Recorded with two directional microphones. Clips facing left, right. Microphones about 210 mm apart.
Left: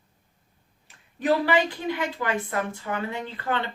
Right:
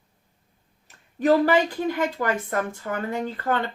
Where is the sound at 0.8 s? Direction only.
45° right (ahead or behind).